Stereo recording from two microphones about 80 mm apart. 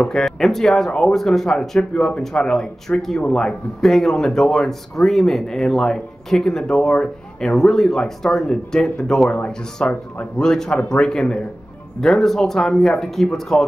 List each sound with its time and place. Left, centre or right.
0.1 s speech: centre